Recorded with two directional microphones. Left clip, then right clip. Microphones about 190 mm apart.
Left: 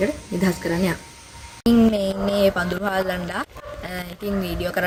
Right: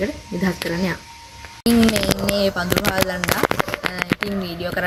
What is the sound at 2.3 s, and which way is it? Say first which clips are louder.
Speech: left 1 dB; 5° left (ahead or behind).